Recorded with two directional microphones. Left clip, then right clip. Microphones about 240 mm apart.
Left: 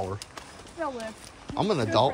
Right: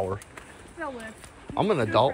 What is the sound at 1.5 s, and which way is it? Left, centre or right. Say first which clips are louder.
Speech: right 2 dB; centre.